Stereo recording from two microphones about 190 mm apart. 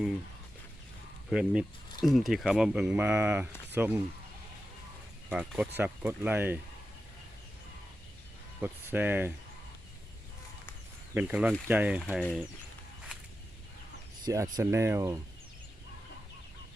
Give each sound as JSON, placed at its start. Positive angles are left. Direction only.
{"t": 1.3, "sound": "speech", "side_deg": -5}
{"t": 5.3, "sound": "speech", "side_deg": -5}
{"t": 8.6, "sound": "speech", "side_deg": -10}
{"t": 11.1, "sound": "speech", "side_deg": -5}
{"t": 14.3, "sound": "speech", "side_deg": -20}